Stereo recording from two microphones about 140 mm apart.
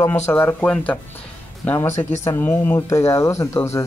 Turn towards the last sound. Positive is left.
turn(degrees=20)  # may be behind; listen again after turning